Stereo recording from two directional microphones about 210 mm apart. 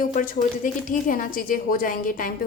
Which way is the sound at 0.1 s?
40° left (ahead or behind).